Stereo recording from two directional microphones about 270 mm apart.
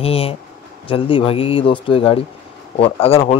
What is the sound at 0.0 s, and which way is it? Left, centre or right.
Speech, left.